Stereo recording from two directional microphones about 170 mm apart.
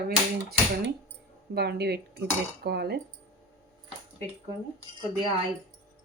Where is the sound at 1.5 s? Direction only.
75° right (ahead or behind).